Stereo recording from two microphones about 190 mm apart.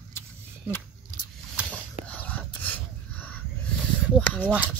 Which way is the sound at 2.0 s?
10° left (ahead or behind).